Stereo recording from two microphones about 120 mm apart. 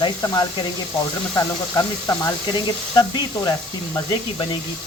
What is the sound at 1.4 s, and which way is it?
Speech, 30° left (ahead or behind).